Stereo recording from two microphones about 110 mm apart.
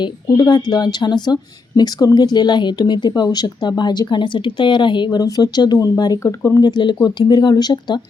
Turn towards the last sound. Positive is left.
turn(degrees=40)  # may be behind; listen again after turning